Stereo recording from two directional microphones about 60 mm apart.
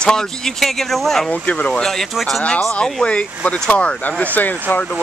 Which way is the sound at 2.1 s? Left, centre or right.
Centre.